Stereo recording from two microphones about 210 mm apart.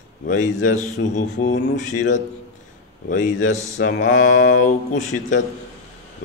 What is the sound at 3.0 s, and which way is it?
Speech, 35° left (ahead or behind).